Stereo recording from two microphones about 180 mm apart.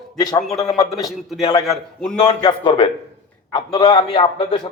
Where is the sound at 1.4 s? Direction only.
30° left (ahead or behind).